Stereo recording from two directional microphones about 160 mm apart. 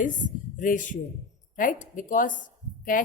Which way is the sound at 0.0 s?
55° left (ahead or behind).